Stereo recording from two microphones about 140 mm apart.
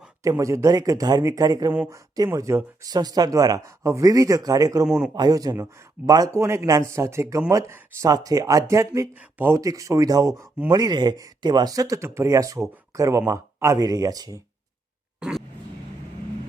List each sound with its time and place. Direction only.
0.2 s speech: 25° right (ahead or behind)
1.7 s speech: 15° right (ahead or behind)
2.1 s speech: 25° right (ahead or behind)
4.9 s speech: 5° right (ahead or behind)
5.1 s speech: 30° right (ahead or behind)
15.2 s vehicle: 5° right (ahead or behind)